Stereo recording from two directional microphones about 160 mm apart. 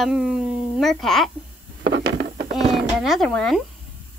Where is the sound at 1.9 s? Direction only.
90° right.